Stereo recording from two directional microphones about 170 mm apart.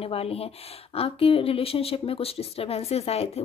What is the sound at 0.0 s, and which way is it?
A woman's voice, 35° left (ahead or behind).